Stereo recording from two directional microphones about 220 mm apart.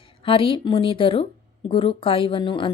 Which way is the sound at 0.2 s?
25° left (ahead or behind).